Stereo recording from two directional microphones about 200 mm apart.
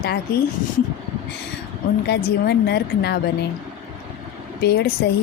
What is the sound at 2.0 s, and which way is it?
Speech, 55° left (ahead or behind).